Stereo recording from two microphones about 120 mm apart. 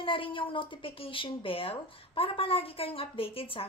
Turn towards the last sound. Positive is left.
turn(degrees=50)  # may be behind; listen again after turning